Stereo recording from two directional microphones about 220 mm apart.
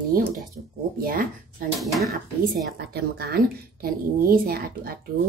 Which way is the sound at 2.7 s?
45° right (ahead or behind).